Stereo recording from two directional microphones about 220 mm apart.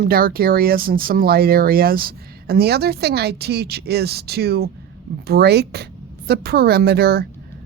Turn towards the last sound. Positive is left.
turn(degrees=-45)  # may be behind; listen again after turning